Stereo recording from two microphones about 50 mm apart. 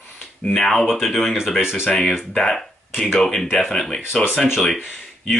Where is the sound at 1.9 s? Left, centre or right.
Left.